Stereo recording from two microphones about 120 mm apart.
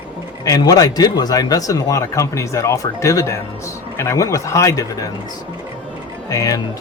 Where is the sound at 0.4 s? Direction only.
30° left (ahead or behind).